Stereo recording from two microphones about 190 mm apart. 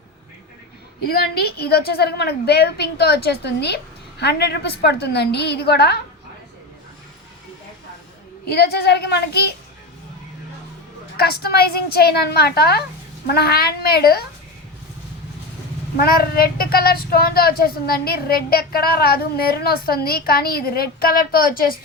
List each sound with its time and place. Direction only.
1.0 s a woman's voice: 55° left (ahead or behind)
8.5 s a woman's voice: 60° left (ahead or behind)
11.2 s a woman's voice: 55° left (ahead or behind)
16.0 s a child's voice: 50° left (ahead or behind)